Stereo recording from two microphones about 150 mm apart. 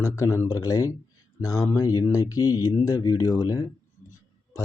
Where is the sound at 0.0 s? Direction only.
20° left (ahead or behind).